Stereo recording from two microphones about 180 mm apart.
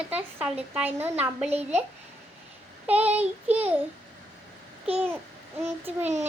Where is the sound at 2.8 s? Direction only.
10° right (ahead or behind).